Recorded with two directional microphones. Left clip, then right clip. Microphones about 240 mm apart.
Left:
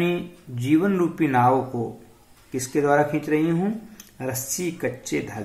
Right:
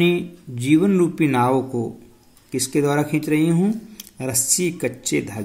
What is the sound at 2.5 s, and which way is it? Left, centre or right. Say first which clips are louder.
Speech: even; right.